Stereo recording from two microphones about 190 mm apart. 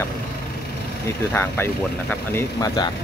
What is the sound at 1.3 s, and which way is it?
Speech, 10° left (ahead or behind).